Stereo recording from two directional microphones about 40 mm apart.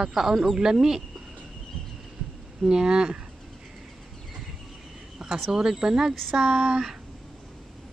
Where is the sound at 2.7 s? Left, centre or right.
Centre.